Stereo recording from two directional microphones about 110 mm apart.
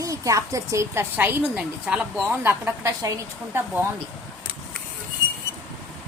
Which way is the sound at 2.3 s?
20° right (ahead or behind).